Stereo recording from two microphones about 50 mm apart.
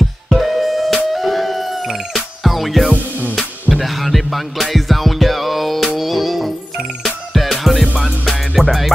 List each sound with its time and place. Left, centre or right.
0.3 s music: centre
2.9 s music: right
3.7 s music: centre